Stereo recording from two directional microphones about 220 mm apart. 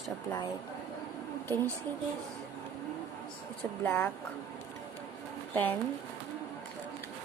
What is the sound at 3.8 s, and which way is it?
Speech, 10° left (ahead or behind).